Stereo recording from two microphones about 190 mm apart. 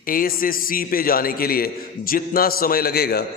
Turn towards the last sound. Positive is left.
turn(degrees=55)  # may be behind; listen again after turning